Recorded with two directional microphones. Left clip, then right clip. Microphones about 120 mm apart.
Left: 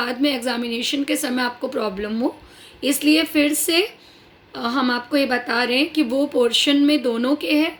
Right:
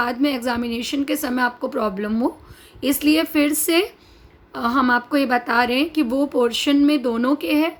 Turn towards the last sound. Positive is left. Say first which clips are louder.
# even
turn(degrees=-50)  # may be behind; listen again after turning